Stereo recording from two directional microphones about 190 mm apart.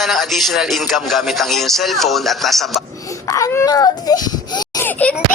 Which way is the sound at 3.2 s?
15° left (ahead or behind).